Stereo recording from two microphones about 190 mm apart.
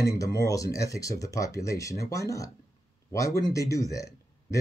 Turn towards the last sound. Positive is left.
turn(degrees=15)  # may be behind; listen again after turning